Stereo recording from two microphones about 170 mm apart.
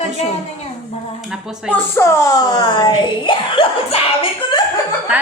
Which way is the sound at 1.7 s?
15° left (ahead or behind).